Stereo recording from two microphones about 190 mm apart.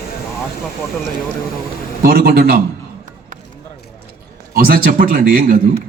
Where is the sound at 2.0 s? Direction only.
55° right (ahead or behind).